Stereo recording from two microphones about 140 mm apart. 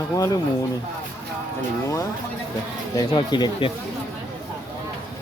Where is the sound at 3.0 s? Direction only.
30° left (ahead or behind).